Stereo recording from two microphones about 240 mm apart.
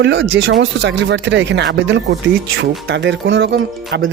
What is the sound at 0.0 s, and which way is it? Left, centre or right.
Speech, right.